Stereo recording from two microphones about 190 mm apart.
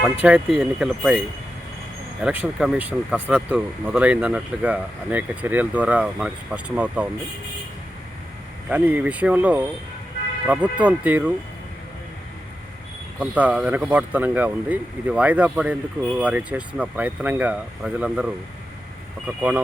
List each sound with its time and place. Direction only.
0.2 s speech: 5° right (ahead or behind)
2.2 s speech: 5° right (ahead or behind)
8.7 s speech: 10° right (ahead or behind)
13.1 s speech: 5° right (ahead or behind)
19.4 s speech: 5° right (ahead or behind)